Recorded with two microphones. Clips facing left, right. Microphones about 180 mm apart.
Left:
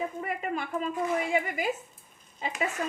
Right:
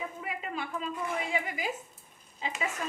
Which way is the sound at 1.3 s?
55° left (ahead or behind).